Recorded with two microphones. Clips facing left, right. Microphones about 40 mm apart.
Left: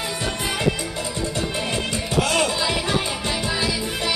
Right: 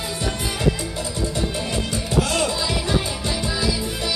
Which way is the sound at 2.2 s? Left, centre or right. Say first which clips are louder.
Left 1 dB; left.